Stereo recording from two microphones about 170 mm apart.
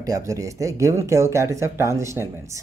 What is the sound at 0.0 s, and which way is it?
Speech, 20° right (ahead or behind).